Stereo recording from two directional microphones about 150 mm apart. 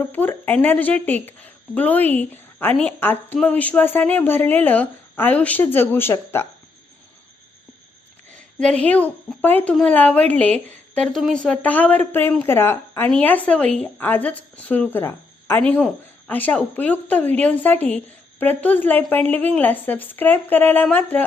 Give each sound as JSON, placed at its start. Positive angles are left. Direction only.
{"t": 0.0, "sound": "speech", "side_deg": 10}
{"t": 8.5, "sound": "speech", "side_deg": 10}